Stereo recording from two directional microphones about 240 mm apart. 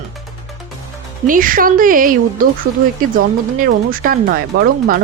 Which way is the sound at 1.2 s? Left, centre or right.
Right.